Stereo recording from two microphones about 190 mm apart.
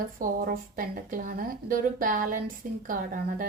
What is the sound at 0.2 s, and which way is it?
A woman's voice, 50° right (ahead or behind).